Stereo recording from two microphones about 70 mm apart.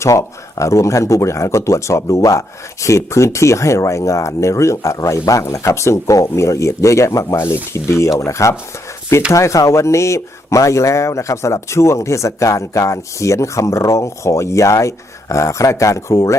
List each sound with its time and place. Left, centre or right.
0.0 s speech: left
7.3 s speech: left